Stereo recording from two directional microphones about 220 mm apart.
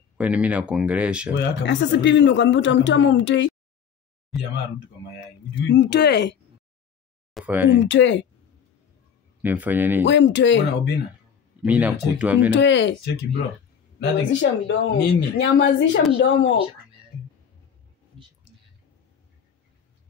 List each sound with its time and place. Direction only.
0.2 s speech: 5° right (ahead or behind)
1.3 s speech: 55° left (ahead or behind)
5.7 s speech: 50° left (ahead or behind)
7.3 s speech: 5° right (ahead or behind)
7.8 s speech: 55° left (ahead or behind)
9.4 s speech: 10° right (ahead or behind)
10.0 s speech: 55° left (ahead or behind)
11.6 s speech: 5° right (ahead or behind)
12.5 s speech: 55° left (ahead or behind)
18.1 s a sound: 20° right (ahead or behind)